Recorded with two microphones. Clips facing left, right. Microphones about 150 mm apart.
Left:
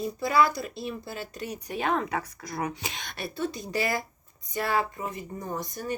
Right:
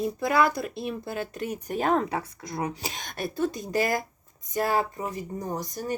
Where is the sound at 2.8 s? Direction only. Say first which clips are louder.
Right 3 dB; 45° right (ahead or behind).